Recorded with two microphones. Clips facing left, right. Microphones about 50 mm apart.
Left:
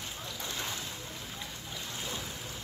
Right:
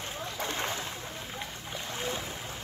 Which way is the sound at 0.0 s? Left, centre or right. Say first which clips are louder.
Right 5 dB; right.